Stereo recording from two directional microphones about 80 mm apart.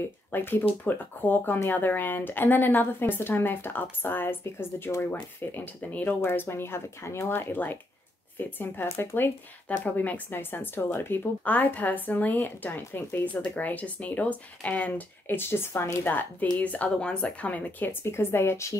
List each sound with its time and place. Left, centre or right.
0.3 s speech: left